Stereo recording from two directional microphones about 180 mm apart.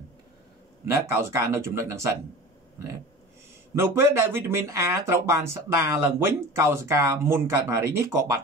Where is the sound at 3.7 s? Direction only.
15° right (ahead or behind).